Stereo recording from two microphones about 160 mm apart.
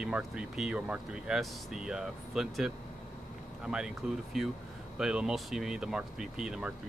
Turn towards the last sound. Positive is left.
turn(degrees=-5)  # may be behind; listen again after turning